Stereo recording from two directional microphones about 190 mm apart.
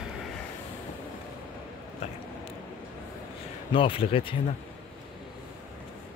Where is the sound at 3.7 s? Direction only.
30° left (ahead or behind).